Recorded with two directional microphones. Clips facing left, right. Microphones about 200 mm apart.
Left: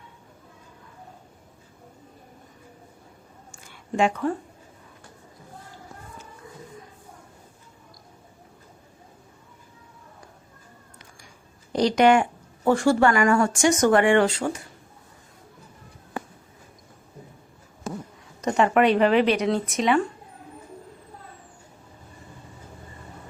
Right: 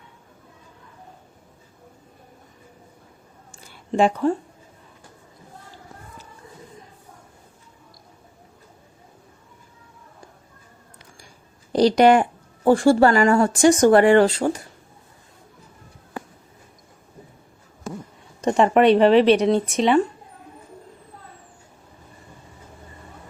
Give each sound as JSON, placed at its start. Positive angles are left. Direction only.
{"t": 3.9, "sound": "speech", "side_deg": -30}
{"t": 11.7, "sound": "speech", "side_deg": -35}
{"t": 18.4, "sound": "speech", "side_deg": -30}